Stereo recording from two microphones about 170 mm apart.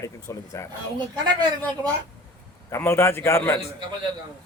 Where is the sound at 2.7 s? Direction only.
15° left (ahead or behind).